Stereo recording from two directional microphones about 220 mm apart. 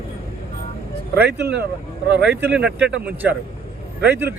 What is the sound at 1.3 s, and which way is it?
Speech, 50° right (ahead or behind).